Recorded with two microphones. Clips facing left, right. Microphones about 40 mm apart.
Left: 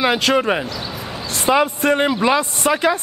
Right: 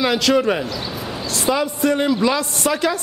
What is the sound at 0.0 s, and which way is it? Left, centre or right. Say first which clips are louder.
Speech: even; left.